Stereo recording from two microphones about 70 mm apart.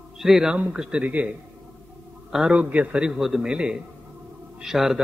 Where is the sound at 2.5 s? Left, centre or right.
Right.